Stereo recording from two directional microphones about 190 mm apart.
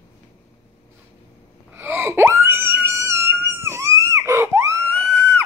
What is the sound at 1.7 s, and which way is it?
Screaming, 10° right (ahead or behind).